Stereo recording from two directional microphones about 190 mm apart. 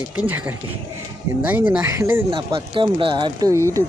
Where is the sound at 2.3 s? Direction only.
30° right (ahead or behind).